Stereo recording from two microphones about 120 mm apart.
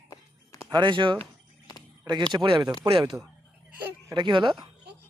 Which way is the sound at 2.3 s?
40° right (ahead or behind).